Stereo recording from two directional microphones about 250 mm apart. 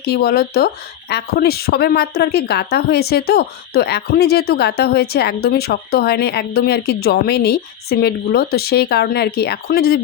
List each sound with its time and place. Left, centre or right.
0.0 s speech: left